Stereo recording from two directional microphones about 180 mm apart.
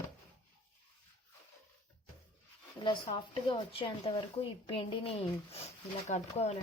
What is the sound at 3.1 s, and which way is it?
A woman's voice, 30° left (ahead or behind).